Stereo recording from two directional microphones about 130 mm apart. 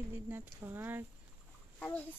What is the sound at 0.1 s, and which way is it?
Speech, 15° right (ahead or behind).